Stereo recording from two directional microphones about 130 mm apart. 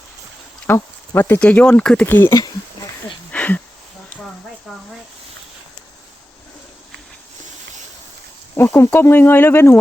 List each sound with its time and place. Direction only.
0.7 s speech: 15° left (ahead or behind)
2.0 s speech: 15° left (ahead or behind)
3.3 s a sound: 10° left (ahead or behind)
4.7 s speech: 5° left (ahead or behind)
8.5 s speech: 15° left (ahead or behind)